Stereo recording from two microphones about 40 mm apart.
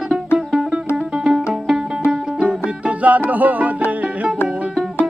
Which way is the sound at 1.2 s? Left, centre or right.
Centre.